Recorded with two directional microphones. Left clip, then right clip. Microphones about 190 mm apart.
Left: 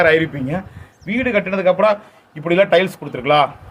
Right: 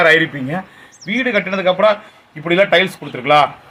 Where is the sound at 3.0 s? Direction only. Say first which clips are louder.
Even; 5° left (ahead or behind).